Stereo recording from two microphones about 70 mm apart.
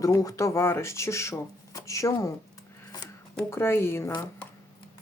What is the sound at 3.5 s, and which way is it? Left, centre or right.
Speech, left.